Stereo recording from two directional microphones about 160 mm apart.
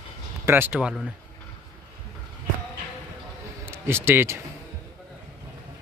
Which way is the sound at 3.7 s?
15° right (ahead or behind).